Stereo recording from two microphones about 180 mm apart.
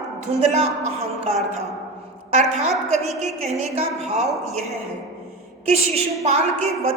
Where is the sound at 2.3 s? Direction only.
40° right (ahead or behind).